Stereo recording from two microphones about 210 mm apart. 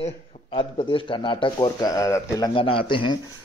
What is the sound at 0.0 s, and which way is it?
Speech, 25° left (ahead or behind).